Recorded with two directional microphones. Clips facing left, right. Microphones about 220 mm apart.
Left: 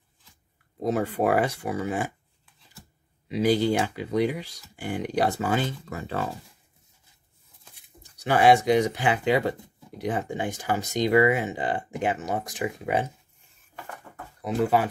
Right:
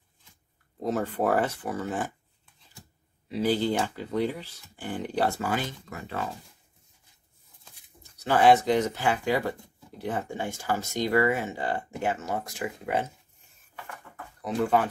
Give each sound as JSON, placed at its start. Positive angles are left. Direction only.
{"t": 0.8, "sound": "speech", "side_deg": 10}
{"t": 3.3, "sound": "speech", "side_deg": 15}
{"t": 8.0, "sound": "speech", "side_deg": 15}
{"t": 14.4, "sound": "speech", "side_deg": 10}